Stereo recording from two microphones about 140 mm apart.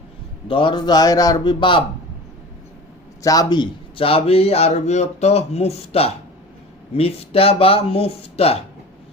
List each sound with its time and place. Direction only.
0.4 s a man's voice: 35° left (ahead or behind)
3.2 s a man's voice: 30° left (ahead or behind); by 8.5 s 45° left (ahead or behind)